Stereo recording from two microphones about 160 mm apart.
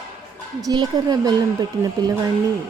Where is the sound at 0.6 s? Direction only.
25° right (ahead or behind).